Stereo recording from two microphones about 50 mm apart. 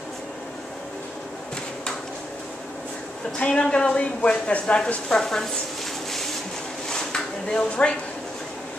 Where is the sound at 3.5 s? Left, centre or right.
Centre.